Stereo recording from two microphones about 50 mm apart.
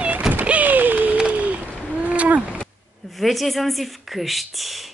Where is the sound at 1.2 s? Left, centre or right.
Right.